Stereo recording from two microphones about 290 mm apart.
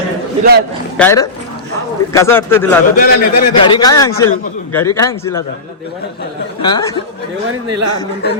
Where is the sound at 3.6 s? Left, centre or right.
Centre.